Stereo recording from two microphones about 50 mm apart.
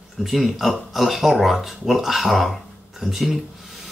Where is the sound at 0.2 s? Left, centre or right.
Centre.